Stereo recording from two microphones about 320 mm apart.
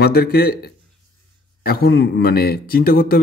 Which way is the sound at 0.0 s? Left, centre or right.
Left.